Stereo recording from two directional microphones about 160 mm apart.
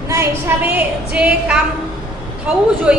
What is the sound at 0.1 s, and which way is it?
A woman's voice, 15° right (ahead or behind).